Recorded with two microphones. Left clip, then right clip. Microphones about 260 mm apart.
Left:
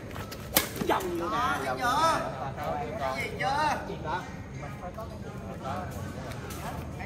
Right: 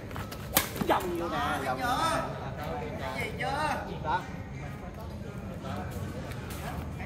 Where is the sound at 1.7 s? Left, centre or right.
Centre.